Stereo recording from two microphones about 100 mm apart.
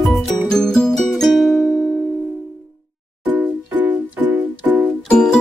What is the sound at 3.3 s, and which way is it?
Music, 15° right (ahead or behind).